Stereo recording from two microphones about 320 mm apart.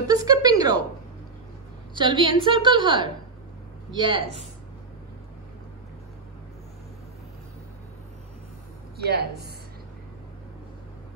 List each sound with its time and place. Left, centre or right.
0.0 s a sound: centre
2.0 s a woman's voice: centre
8.9 s speech: right